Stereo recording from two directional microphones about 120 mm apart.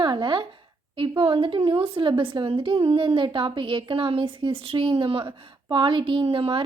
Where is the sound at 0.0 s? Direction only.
40° right (ahead or behind).